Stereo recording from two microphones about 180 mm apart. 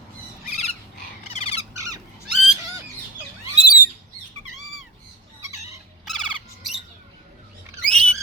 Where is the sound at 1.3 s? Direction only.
35° left (ahead or behind).